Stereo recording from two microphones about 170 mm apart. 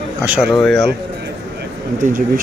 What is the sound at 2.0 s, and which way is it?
Speech, 50° right (ahead or behind).